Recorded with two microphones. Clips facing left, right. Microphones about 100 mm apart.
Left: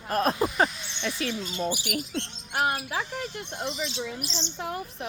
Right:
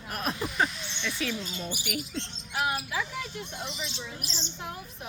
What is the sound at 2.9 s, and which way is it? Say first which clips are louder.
Speech: left 2 dB; 65° left (ahead or behind).